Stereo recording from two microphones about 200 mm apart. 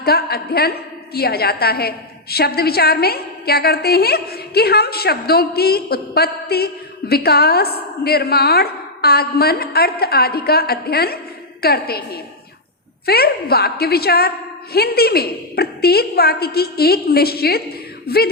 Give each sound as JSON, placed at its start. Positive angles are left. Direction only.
{"t": 0.0, "sound": "a woman's voice", "side_deg": 50}